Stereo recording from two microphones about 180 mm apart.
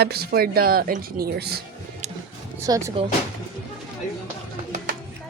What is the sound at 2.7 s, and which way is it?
Speech, 15° right (ahead or behind).